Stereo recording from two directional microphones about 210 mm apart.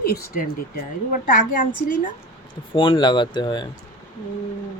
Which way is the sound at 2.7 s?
25° left (ahead or behind).